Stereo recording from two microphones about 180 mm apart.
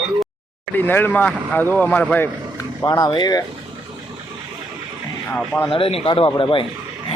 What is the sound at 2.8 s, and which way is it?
Speech, 20° left (ahead or behind).